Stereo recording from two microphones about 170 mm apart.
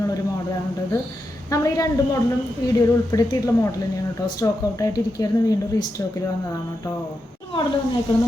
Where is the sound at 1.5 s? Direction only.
20° left (ahead or behind).